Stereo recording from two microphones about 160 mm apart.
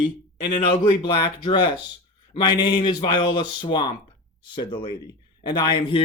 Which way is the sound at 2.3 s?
30° left (ahead or behind).